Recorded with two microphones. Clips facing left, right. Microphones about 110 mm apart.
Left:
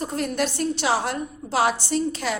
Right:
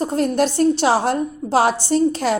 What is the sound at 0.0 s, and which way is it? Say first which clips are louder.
A woman's voice: right 7 dB; 35° right (ahead or behind).